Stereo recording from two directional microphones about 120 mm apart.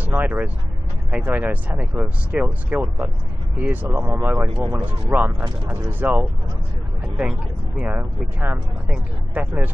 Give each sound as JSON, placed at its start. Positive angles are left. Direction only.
{"t": 0.0, "sound": "a sound", "side_deg": -15}
{"t": 1.1, "sound": "speech", "side_deg": -15}
{"t": 7.8, "sound": "speech", "side_deg": -15}